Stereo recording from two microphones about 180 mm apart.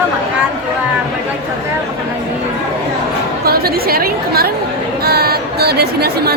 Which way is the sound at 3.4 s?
60° right (ahead or behind).